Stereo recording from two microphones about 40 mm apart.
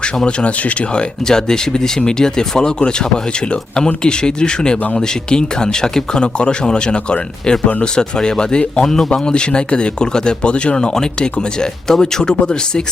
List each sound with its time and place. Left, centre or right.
0.3 s speech: left
1.2 s speech: centre